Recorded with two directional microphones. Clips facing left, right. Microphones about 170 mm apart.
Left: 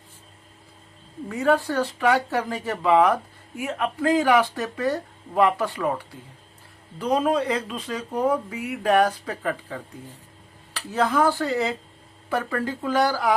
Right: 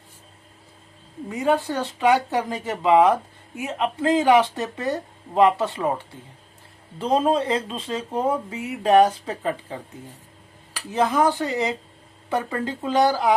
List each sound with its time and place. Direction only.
1.3 s speech: 20° right (ahead or behind)